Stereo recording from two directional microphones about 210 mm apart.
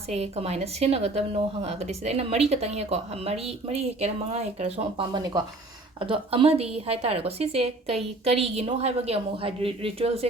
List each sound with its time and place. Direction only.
0.1 s a woman's voice: 30° right (ahead or behind)